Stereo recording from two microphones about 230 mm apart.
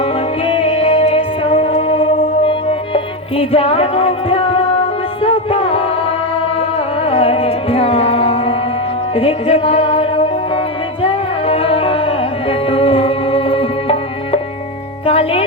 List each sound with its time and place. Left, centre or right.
0.0 s music: left
15.0 s music: left